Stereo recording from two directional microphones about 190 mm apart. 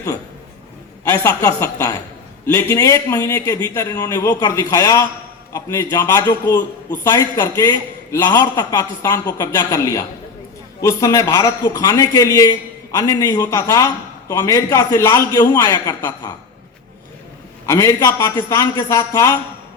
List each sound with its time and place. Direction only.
1.0 s a man's voice: 20° left (ahead or behind)
17.7 s a man's voice: 15° left (ahead or behind)